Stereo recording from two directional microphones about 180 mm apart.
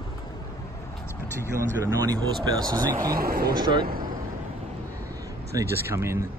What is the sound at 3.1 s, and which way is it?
Speech, 55° right (ahead or behind).